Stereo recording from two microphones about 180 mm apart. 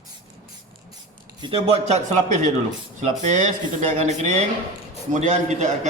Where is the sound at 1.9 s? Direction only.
45° right (ahead or behind).